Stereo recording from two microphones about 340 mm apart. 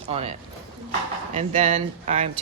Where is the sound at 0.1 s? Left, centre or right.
Centre.